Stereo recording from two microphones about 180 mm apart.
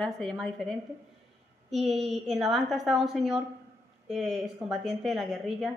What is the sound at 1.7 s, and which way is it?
A woman's voice, centre (ahead or behind).